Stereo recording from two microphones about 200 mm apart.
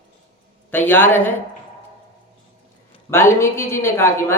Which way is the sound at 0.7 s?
10° left (ahead or behind).